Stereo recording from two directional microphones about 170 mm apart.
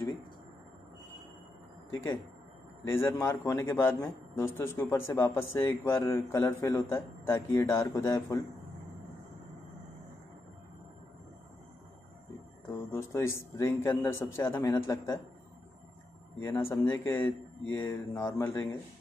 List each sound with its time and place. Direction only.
1.9 s a man's voice: 15° left (ahead or behind)
12.6 s a man's voice: 15° left (ahead or behind)
16.3 s a man's voice: 15° left (ahead or behind)